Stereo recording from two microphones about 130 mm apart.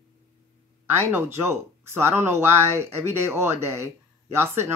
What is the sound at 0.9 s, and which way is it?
A man's voice, 20° right (ahead or behind).